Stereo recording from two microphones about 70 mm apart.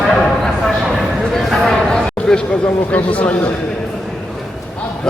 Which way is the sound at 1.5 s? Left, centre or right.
Centre.